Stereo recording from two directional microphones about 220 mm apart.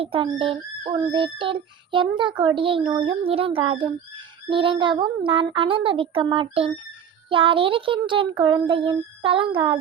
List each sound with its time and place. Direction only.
0.0 s child singing: 25° right (ahead or behind)